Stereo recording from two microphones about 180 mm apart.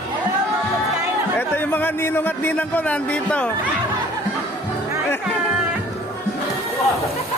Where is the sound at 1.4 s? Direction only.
10° left (ahead or behind).